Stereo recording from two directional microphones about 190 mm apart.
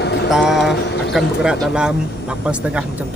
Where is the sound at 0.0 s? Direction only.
60° left (ahead or behind).